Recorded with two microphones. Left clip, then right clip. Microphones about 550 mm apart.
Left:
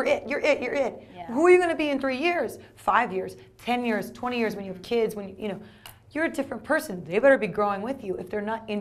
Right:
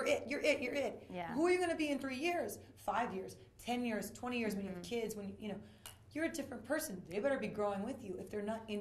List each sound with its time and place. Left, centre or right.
0.0 s a woman's voice: left